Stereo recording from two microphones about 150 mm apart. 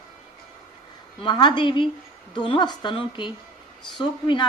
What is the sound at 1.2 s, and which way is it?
A woman's voice, 30° left (ahead or behind).